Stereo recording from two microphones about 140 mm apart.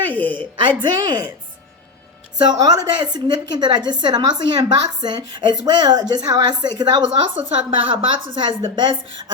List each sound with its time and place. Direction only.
0.1 s a sound: 15° left (ahead or behind)
0.8 s speech: 30° right (ahead or behind)
2.5 s speech: 30° right (ahead or behind)